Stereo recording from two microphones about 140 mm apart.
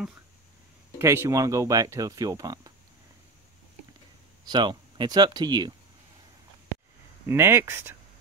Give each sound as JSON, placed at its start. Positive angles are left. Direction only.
{"t": 0.9, "sound": "speech", "side_deg": -20}
{"t": 4.5, "sound": "speech", "side_deg": -35}
{"t": 7.2, "sound": "speech", "side_deg": -15}